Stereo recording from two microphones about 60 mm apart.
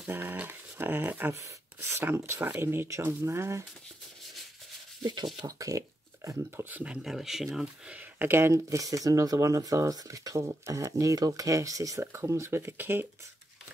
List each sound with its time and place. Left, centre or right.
0.0 s speech: right
0.3 s dog: right
1.4 s speech: right
5.6 s a sound: right
6.5 s speech: right
7.0 s speech: centre
7.9 s speech: right
8.6 s speech: right
12.0 s speech: right